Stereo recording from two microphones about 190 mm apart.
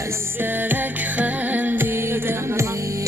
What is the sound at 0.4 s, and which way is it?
Music, 10° right (ahead or behind).